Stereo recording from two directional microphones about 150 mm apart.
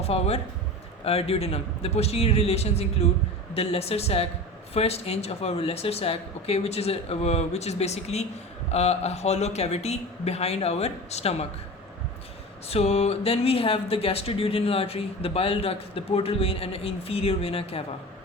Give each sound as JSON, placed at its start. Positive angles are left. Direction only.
{"t": 0.0, "sound": "speech", "side_deg": 45}
{"t": 12.6, "sound": "speech", "side_deg": 45}